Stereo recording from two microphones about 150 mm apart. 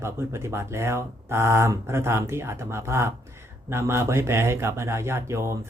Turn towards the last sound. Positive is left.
turn(degrees=-20)  # may be behind; listen again after turning